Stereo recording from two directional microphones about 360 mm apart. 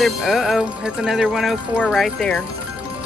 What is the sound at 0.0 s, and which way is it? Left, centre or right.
Speech, centre.